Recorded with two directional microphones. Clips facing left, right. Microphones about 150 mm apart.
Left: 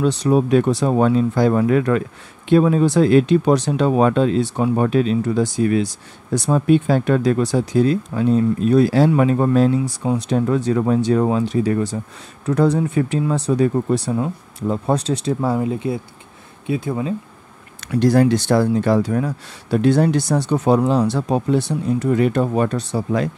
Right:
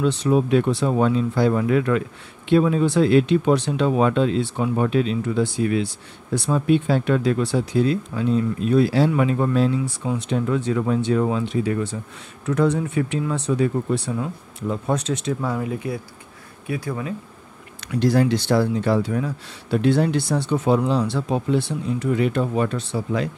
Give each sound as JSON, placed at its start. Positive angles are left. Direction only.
{"t": 0.0, "sound": "speech", "side_deg": 40}
{"t": 17.7, "sound": "speech", "side_deg": 45}